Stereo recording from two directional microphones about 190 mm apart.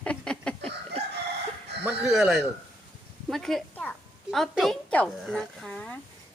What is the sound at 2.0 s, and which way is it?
Speech, centre (ahead or behind).